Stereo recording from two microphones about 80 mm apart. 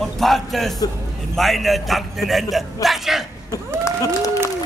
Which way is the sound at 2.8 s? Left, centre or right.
Centre.